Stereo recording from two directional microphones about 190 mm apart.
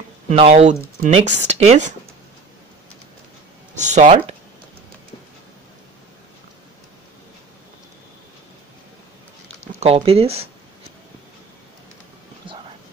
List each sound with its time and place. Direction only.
0.3 s speech: 35° right (ahead or behind)
3.7 s speech: 40° right (ahead or behind)
9.8 s speech: 30° right (ahead or behind)
12.4 s whispering: 25° right (ahead or behind)